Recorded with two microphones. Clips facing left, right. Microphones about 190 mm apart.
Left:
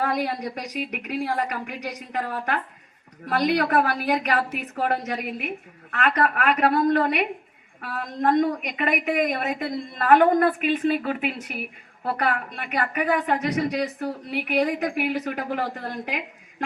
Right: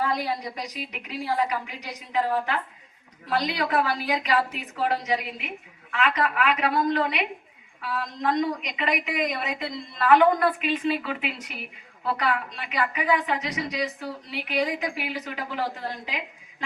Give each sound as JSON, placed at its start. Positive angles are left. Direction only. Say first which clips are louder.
{"t": 0.0, "sound": "a woman's voice", "louder": "left 2 dB", "side_deg": 55}